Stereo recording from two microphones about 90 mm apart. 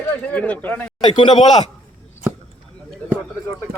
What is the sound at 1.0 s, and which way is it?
Speech, 55° left (ahead or behind).